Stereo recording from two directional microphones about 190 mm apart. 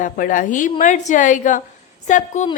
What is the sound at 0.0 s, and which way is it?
A woman's voice, 45° left (ahead or behind).